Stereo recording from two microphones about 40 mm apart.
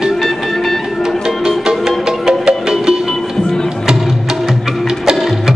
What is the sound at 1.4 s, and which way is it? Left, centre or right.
Music, centre.